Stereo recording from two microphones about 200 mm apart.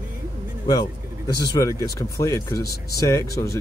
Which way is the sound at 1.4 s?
15° left (ahead or behind).